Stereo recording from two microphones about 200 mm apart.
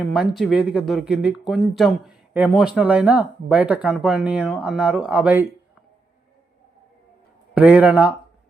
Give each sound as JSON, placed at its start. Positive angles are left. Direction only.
{"t": 0.1, "sound": "speech", "side_deg": 0}
{"t": 7.5, "sound": "speech", "side_deg": -10}